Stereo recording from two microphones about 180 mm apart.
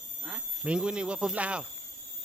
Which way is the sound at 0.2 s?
Centre (ahead or behind).